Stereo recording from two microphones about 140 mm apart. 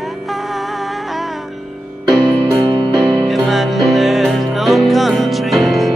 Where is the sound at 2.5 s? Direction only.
35° right (ahead or behind).